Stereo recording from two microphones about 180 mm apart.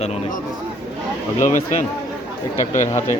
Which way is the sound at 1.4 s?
45° left (ahead or behind).